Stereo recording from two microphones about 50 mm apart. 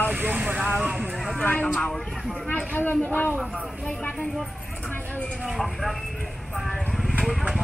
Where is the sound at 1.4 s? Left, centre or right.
Left.